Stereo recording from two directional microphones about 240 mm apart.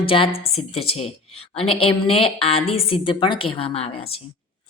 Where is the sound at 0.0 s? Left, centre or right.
Left.